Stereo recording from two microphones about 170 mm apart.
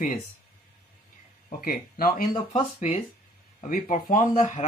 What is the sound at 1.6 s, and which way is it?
Speech, 60° left (ahead or behind).